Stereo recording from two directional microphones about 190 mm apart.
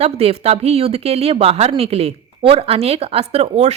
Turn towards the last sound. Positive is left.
turn(degrees=-35)  # may be behind; listen again after turning